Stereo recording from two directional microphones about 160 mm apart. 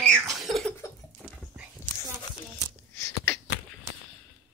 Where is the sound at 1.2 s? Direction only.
5° left (ahead or behind).